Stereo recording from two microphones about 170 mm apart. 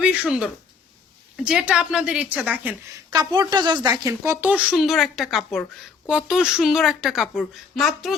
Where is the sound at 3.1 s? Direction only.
25° right (ahead or behind).